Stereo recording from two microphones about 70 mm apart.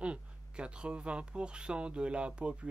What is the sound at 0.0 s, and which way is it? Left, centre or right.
Speech, centre.